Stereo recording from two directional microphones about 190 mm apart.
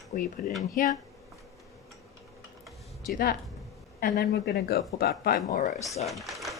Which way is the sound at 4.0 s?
55° left (ahead or behind).